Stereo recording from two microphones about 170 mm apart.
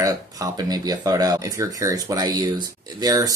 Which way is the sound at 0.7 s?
20° right (ahead or behind).